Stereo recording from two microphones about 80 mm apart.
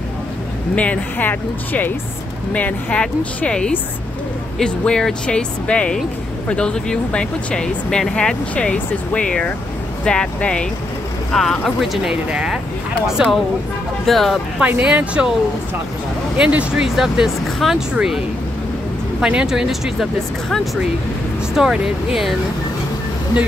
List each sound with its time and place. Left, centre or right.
0.7 s speech: centre
14.0 s speech: centre
14.6 s speech: centre
16.3 s speech: centre
19.2 s speech: centre